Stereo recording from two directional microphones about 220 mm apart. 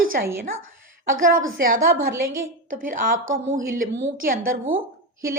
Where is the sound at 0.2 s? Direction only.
40° right (ahead or behind).